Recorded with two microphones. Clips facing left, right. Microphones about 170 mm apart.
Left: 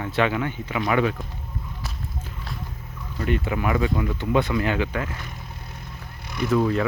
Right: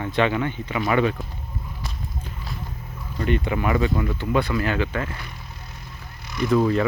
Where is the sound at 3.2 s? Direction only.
5° left (ahead or behind).